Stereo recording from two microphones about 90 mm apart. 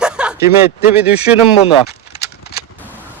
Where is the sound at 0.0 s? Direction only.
10° right (ahead or behind).